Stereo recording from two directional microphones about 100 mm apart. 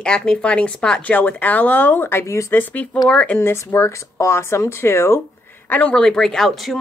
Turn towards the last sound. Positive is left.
turn(degrees=0)  # may be behind; listen again after turning